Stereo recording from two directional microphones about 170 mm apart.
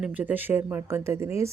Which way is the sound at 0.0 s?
10° right (ahead or behind).